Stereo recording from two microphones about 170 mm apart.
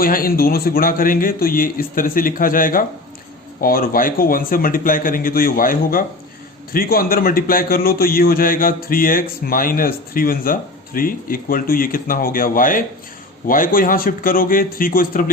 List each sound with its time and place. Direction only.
0.0 s a man's voice: 55° left (ahead or behind)